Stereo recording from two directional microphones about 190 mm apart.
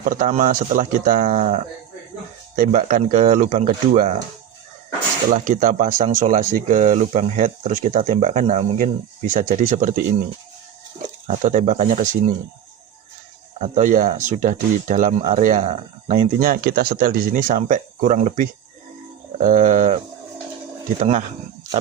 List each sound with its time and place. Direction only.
0.1 s speech: 45° right (ahead or behind)
5.3 s speech: 45° right (ahead or behind)
11.3 s speech: 35° right (ahead or behind)
13.6 s speech: 40° right (ahead or behind)
16.4 s speech: 50° right (ahead or behind)
21.0 s speech: 40° right (ahead or behind)